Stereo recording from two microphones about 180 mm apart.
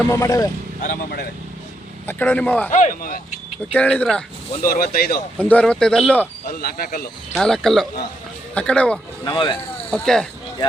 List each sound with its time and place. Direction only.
0.0 s a man's voice: 20° left (ahead or behind)
0.8 s speech: 60° left (ahead or behind)
2.0 s a man's voice: 10° left (ahead or behind)
2.7 s speech: 45° left (ahead or behind)
3.8 s a man's voice: 10° left (ahead or behind)
4.6 s speech: 50° left (ahead or behind)
5.4 s speech: 10° left (ahead or behind)
6.6 s speech: 60° left (ahead or behind)
7.3 s a man's voice: centre (ahead or behind)
9.2 s speech: 25° left (ahead or behind)
9.9 s speech: 5° left (ahead or behind)